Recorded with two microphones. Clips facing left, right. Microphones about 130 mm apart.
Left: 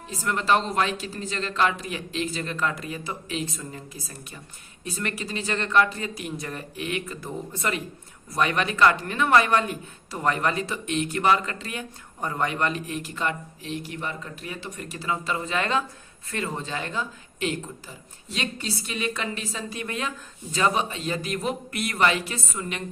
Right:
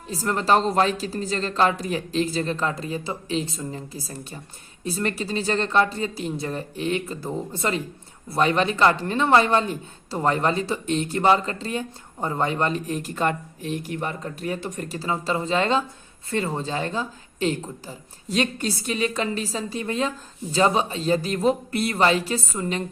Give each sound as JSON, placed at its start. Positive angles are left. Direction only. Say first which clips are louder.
{"t": 0.1, "sound": "speech", "louder": "right 3 dB", "side_deg": -35}